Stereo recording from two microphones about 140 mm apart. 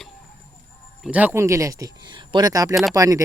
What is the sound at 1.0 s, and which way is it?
Speech, 10° right (ahead or behind).